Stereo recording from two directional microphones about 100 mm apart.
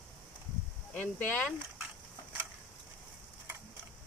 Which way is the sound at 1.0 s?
15° left (ahead or behind).